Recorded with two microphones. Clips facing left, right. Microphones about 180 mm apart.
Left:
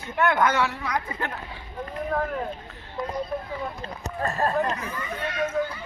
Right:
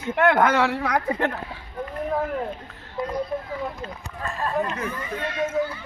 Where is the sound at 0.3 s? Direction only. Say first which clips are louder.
Right 3 dB; 65° right (ahead or behind).